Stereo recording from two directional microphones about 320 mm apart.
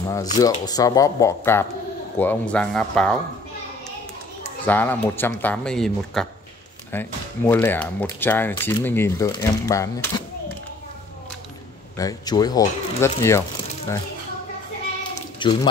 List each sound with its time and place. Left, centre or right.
0.4 s speech: centre
4.6 s speech: centre
12.0 s speech: centre
15.3 s speech: centre